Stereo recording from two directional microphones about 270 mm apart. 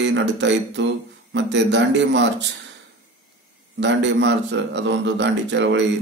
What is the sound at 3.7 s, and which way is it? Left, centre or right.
A man's voice, right.